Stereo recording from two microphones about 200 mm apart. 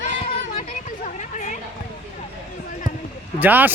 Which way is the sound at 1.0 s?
40° left (ahead or behind).